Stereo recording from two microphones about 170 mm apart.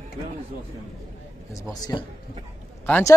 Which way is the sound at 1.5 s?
20° left (ahead or behind).